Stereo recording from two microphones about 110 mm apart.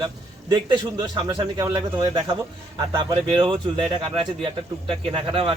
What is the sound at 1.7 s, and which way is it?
Speech, 35° right (ahead or behind).